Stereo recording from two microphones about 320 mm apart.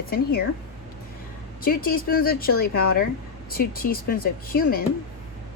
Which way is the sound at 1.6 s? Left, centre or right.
Left.